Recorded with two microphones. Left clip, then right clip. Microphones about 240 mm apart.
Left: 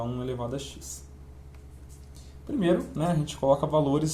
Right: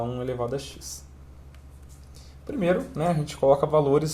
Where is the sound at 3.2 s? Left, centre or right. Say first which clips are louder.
Right 4 dB; right.